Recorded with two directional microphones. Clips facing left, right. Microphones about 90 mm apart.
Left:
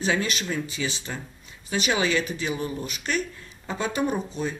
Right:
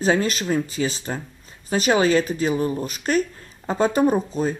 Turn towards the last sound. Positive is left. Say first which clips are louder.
# right 7 dB
turn(degrees=-40)  # may be behind; listen again after turning